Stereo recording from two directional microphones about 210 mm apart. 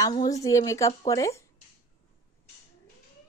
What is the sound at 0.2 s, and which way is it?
Speech, 15° left (ahead or behind).